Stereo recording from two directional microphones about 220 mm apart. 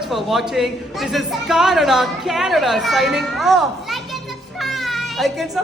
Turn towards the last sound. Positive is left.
turn(degrees=0)  # may be behind; listen again after turning